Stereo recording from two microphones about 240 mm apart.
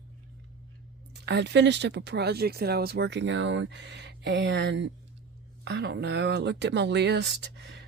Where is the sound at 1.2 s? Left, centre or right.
Right.